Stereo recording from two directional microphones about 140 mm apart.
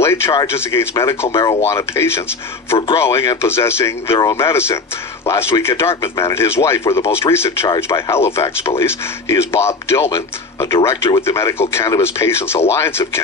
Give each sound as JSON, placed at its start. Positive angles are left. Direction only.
{"t": 0.0, "sound": "a sound", "side_deg": 20}
{"t": 0.3, "sound": "speech", "side_deg": 30}
{"t": 7.6, "sound": "speech", "side_deg": 30}
{"t": 8.1, "sound": "speech", "side_deg": 20}